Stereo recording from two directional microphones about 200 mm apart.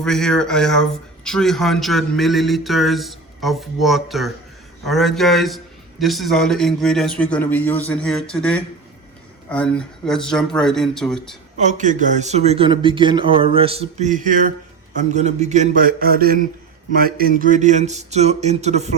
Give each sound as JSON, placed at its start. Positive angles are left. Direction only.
{"t": 0.0, "sound": "a man's voice", "side_deg": 5}
{"t": 11.5, "sound": "a man's voice", "side_deg": -35}